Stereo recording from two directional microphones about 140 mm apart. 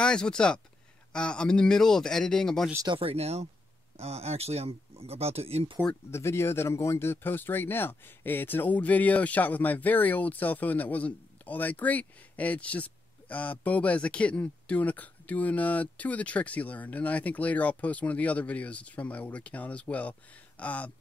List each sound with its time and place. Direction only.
0.0 s speech: 5° left (ahead or behind)
2.9 s speech: 40° right (ahead or behind)
6.1 s speech: 20° left (ahead or behind)